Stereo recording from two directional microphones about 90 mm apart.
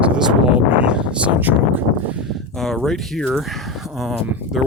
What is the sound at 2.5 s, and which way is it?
Speech, 5° left (ahead or behind).